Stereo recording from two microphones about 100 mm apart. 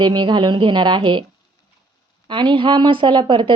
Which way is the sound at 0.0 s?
50° right (ahead or behind).